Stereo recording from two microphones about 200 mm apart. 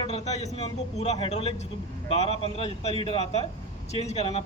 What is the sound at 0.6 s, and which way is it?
Speech, 30° left (ahead or behind).